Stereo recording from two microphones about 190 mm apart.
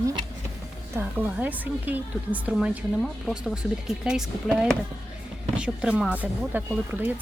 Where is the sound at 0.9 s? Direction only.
10° right (ahead or behind).